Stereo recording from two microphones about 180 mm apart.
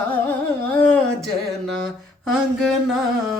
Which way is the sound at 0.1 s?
10° left (ahead or behind).